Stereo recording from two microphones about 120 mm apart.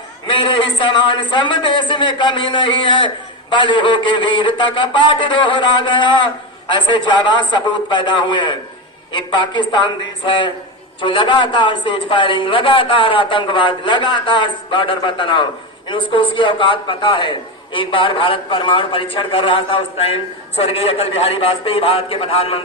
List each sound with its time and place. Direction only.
0.3 s a man's voice: 45° left (ahead or behind)